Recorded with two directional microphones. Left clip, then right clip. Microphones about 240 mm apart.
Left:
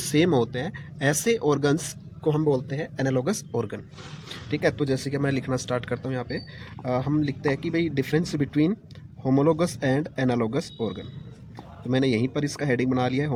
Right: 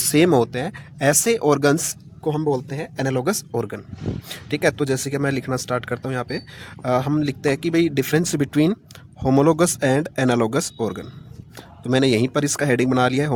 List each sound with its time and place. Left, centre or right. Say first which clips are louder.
0.0 s speech: right 6 dB; right
2.2 s speech: right 2 dB; centre; by 13.3 s right